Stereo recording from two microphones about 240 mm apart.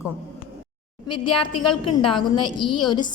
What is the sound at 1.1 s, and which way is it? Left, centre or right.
A woman's voice, left.